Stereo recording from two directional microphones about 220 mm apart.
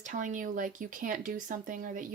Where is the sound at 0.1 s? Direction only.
35° right (ahead or behind).